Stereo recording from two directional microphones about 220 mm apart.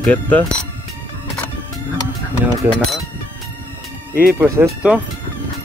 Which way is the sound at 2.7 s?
Centre (ahead or behind).